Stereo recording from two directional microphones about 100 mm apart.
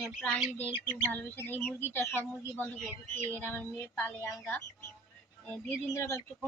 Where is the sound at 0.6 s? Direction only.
20° left (ahead or behind).